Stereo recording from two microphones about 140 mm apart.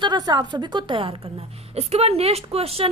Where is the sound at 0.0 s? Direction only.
30° right (ahead or behind).